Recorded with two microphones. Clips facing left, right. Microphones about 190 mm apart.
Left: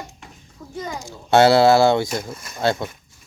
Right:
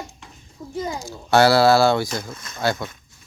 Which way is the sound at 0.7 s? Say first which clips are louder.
Right 3 dB; 10° right (ahead or behind).